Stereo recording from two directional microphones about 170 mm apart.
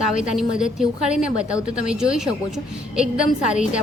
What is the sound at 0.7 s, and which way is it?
Speech, 5° right (ahead or behind).